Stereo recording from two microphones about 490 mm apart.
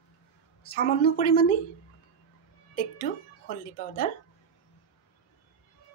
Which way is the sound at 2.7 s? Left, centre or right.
Centre.